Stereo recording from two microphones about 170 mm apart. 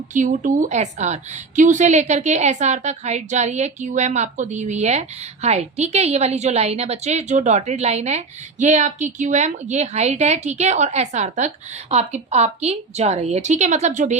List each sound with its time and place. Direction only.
0.1 s a woman's voice: 45° right (ahead or behind)